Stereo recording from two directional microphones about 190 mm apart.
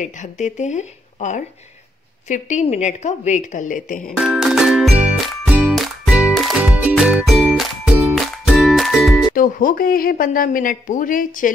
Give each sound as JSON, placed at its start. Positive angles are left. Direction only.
{"t": 0.0, "sound": "a woman's voice", "side_deg": 40}
{"t": 4.2, "sound": "music", "side_deg": 0}
{"t": 9.3, "sound": "speech", "side_deg": 45}